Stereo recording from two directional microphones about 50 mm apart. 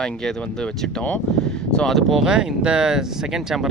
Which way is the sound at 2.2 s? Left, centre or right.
Centre.